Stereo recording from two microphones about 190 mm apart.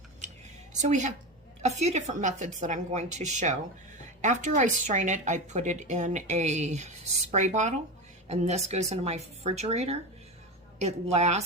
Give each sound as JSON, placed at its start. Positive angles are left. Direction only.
{"t": 0.8, "sound": "a woman's voice", "side_deg": -40}